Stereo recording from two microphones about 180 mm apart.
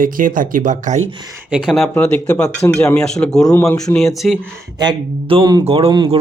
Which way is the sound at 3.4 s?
15° left (ahead or behind).